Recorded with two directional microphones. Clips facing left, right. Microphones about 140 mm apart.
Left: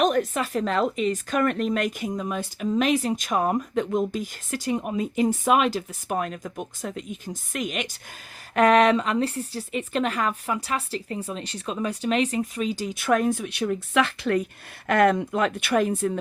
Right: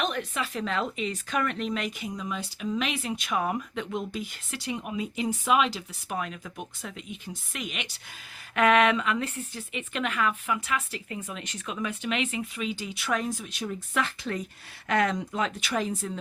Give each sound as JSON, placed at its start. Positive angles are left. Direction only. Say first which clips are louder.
{"t": 0.0, "sound": "speech", "louder": "left 8 dB", "side_deg": 45}
{"t": 14.8, "sound": "speech", "louder": "left 6 dB", "side_deg": 55}